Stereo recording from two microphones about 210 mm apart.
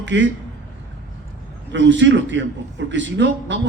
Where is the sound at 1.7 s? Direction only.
60° right (ahead or behind).